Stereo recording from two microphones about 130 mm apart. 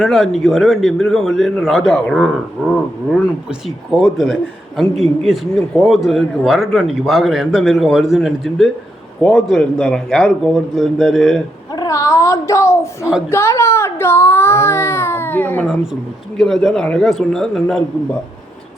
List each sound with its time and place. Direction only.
0.0 s a man's voice: centre (ahead or behind)
3.9 s a man's voice: centre (ahead or behind)
11.8 s speech: 25° left (ahead or behind)
16.4 s a man's voice: centre (ahead or behind)